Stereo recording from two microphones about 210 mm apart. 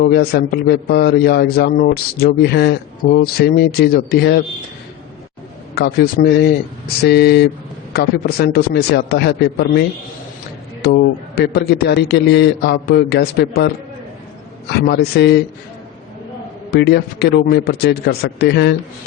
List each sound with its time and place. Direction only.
0.0 s a man's voice: 50° left (ahead or behind)
5.7 s a man's voice: 50° left (ahead or behind)
10.8 s a man's voice: 50° left (ahead or behind)
14.8 s a man's voice: 50° left (ahead or behind)
16.7 s a man's voice: 55° left (ahead or behind)